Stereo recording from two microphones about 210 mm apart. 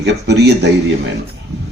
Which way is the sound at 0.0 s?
55° right (ahead or behind).